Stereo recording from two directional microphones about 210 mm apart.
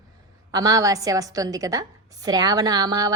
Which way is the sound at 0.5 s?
15° right (ahead or behind).